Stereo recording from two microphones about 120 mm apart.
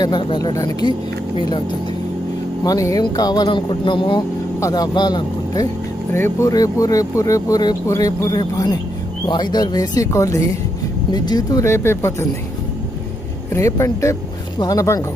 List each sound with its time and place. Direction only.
0.0 s speech: 40° left (ahead or behind)
2.6 s speech: 30° left (ahead or behind)
6.1 s speech: 20° left (ahead or behind)
6.5 s speech: 30° left (ahead or behind)
11.6 s speech: 20° left (ahead or behind)
13.5 s speech: 25° left (ahead or behind)